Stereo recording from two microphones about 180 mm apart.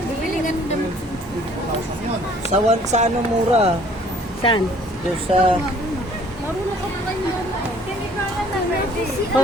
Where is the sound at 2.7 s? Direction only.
40° right (ahead or behind).